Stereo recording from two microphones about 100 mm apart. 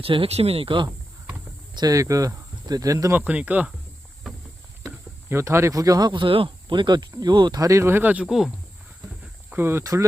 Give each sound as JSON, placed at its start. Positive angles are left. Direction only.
{"t": 0.0, "sound": "speech", "side_deg": -70}
{"t": 1.7, "sound": "speech", "side_deg": -40}
{"t": 3.2, "sound": "speech", "side_deg": -15}
{"t": 4.9, "sound": "speech", "side_deg": -25}
{"t": 8.3, "sound": "speech", "side_deg": -5}
{"t": 9.5, "sound": "speech", "side_deg": -25}
{"t": 9.8, "sound": "speech", "side_deg": -35}